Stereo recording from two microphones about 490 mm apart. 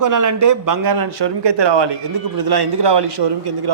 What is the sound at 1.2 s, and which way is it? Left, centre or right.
A man's voice, right.